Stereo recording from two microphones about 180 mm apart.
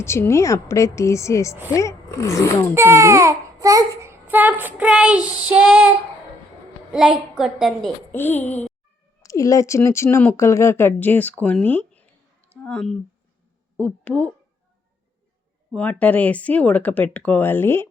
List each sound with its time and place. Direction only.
0.0 s speech: 15° left (ahead or behind)
2.7 s speech: 15° right (ahead or behind)
7.3 s a woman's voice: centre (ahead or behind)
8.1 s speech: 10° left (ahead or behind)
15.7 s speech: 10° left (ahead or behind)